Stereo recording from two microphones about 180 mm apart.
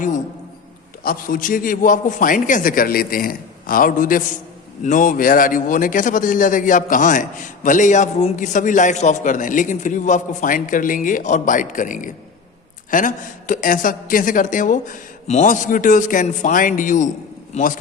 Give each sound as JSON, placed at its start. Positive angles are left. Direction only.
{"t": 1.0, "sound": "a man's voice", "side_deg": 50}